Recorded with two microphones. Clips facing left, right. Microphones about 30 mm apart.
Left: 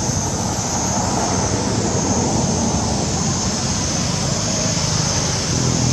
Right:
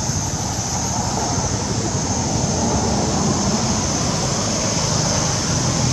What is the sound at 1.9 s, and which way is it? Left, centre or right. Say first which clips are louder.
Vehicle: left 3 dB; centre.